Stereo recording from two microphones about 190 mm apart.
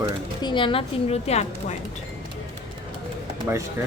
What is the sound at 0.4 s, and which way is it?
A woman's voice, 25° left (ahead or behind).